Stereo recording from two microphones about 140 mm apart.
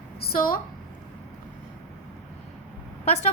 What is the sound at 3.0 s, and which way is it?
Speech, 50° left (ahead or behind).